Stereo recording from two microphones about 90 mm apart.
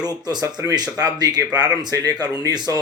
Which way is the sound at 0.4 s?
45° right (ahead or behind).